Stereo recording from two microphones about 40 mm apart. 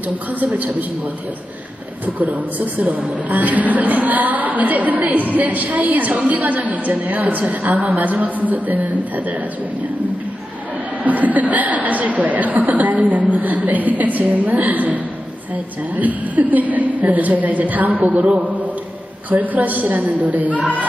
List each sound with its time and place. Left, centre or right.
0.3 s a woman's voice: right
2.0 s a woman's voice: right
11.1 s a woman's voice: right